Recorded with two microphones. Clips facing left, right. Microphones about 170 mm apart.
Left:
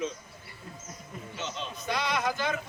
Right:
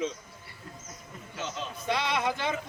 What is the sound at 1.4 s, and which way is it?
Speech, 5° right (ahead or behind).